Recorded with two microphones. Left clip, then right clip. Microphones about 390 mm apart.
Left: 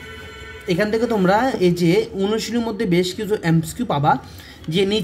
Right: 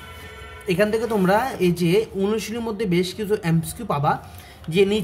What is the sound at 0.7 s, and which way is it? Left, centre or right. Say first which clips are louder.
Speech: left 1 dB; centre.